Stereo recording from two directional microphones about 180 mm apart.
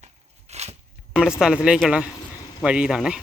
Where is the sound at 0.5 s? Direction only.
35° right (ahead or behind).